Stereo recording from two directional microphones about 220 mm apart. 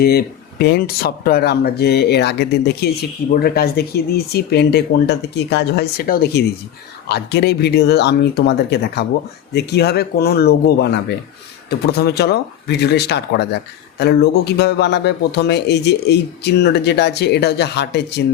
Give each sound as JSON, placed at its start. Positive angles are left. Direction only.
{"t": 0.0, "sound": "speech", "side_deg": 45}